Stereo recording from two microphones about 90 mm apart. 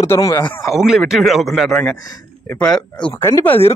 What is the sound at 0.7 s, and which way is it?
Speech, 5° right (ahead or behind).